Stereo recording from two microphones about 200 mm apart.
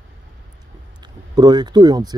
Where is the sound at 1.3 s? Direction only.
20° right (ahead or behind).